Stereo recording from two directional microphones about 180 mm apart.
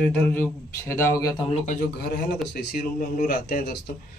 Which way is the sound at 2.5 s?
50° left (ahead or behind).